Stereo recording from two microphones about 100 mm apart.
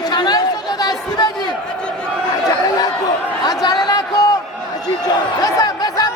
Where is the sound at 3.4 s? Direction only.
40° left (ahead or behind).